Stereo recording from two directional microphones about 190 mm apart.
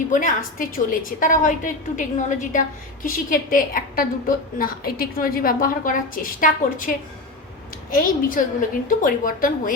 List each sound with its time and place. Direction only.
0.1 s a woman's voice: 45° left (ahead or behind)